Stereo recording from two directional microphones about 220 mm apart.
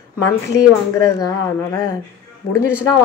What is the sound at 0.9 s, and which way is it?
Speech, 15° left (ahead or behind).